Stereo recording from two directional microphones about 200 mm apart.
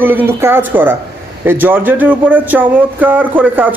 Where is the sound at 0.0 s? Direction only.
10° right (ahead or behind).